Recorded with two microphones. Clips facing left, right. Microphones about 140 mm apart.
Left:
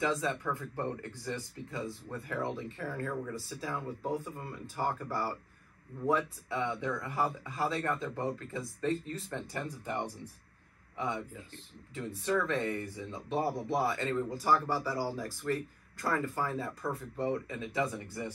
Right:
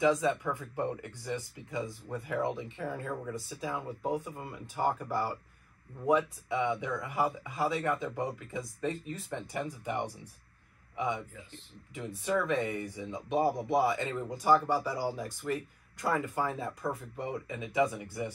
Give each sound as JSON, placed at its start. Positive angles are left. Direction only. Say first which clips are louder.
{"t": 0.0, "sound": "speech", "louder": "right 5 dB", "side_deg": -15}
{"t": 11.9, "sound": "speech", "louder": "even", "side_deg": -15}